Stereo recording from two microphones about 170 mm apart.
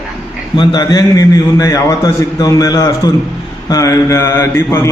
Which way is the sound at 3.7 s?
20° left (ahead or behind).